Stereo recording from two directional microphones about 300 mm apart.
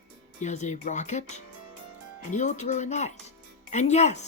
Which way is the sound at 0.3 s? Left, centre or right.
Left.